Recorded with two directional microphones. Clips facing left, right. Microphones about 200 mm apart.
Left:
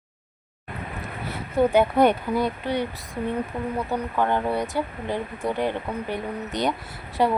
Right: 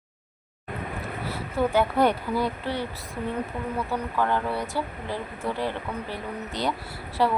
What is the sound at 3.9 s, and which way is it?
Speech, 20° left (ahead or behind).